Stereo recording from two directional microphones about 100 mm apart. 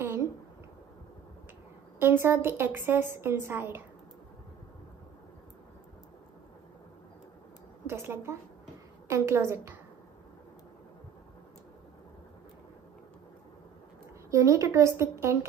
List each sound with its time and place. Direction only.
0.0 s a sound: 20° right (ahead or behind)
2.0 s a woman's voice: 25° right (ahead or behind)
7.8 s a woman's voice: 25° right (ahead or behind)
14.3 s a woman's voice: 30° right (ahead or behind)